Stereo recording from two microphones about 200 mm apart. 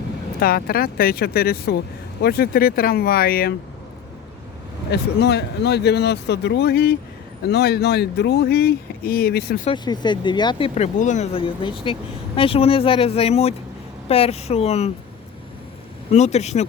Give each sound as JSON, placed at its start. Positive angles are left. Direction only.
{"t": 0.3, "sound": "speech", "side_deg": 50}
{"t": 4.9, "sound": "speech", "side_deg": 55}
{"t": 9.6, "sound": "speech", "side_deg": 20}
{"t": 16.1, "sound": "speech", "side_deg": 35}